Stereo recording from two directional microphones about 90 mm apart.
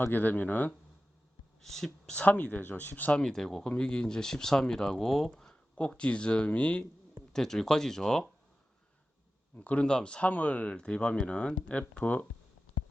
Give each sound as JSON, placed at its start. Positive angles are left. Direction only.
{"t": 0.0, "sound": "speech", "side_deg": 20}
{"t": 1.6, "sound": "speech", "side_deg": 5}
{"t": 9.6, "sound": "speech", "side_deg": 15}